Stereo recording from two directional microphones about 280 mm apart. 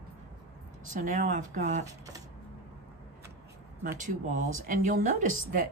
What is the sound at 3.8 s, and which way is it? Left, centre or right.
Speech, right.